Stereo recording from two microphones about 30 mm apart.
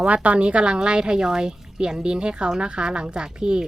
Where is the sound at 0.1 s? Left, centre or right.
Right.